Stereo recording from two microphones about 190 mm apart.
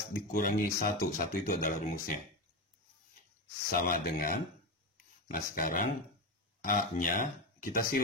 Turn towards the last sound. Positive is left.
turn(degrees=50)  # may be behind; listen again after turning